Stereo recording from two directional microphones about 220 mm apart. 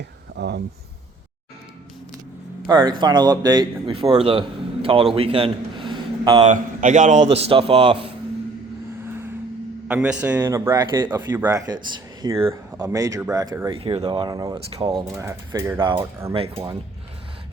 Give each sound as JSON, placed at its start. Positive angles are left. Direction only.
{"t": 0.3, "sound": "speech", "side_deg": -50}
{"t": 2.6, "sound": "a man's voice", "side_deg": -20}
{"t": 6.5, "sound": "speech", "side_deg": -35}
{"t": 9.9, "sound": "speech", "side_deg": -5}
{"t": 15.1, "sound": "speech", "side_deg": -10}
{"t": 15.8, "sound": "speech", "side_deg": -20}